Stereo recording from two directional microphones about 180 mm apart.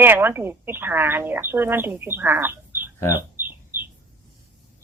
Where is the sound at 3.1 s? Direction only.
10° right (ahead or behind).